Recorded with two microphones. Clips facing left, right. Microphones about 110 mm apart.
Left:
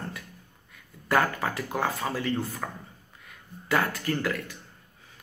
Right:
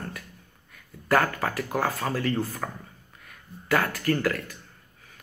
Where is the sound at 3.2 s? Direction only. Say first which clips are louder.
Right 1 dB; 25° left (ahead or behind).